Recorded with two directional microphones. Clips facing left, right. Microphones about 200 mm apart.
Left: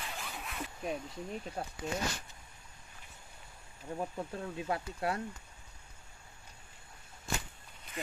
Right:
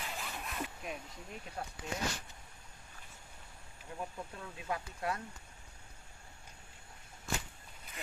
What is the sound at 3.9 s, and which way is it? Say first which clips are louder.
Speech: left 6 dB; 30° left (ahead or behind).